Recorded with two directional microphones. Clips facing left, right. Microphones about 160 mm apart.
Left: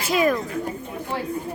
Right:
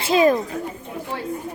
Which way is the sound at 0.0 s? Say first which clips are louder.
Right 4 dB; 25° right (ahead or behind).